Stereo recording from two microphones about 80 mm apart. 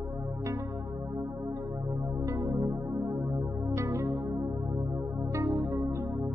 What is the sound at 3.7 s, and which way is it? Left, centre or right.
Music, right.